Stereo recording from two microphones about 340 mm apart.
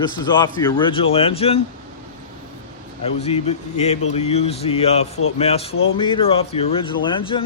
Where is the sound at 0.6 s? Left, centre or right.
Centre.